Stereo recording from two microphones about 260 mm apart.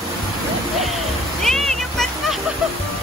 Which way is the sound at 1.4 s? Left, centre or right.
Centre.